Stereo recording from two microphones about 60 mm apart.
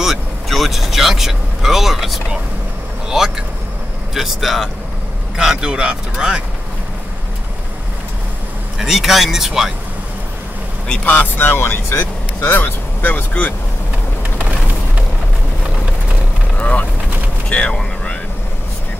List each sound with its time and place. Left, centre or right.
0.0 s vehicle: centre
3.1 s speech: centre
8.7 s speech: centre
10.9 s speech: left
11.3 s speech: left
16.5 s vehicle: left
17.5 s speech: centre